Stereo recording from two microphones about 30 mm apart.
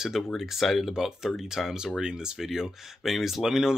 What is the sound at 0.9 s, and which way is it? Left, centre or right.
Speech, centre.